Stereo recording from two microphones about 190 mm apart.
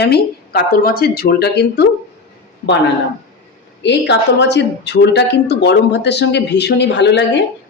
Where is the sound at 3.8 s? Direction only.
65° left (ahead or behind).